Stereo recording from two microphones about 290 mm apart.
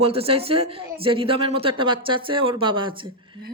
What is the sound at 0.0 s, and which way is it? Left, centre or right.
Speech, centre.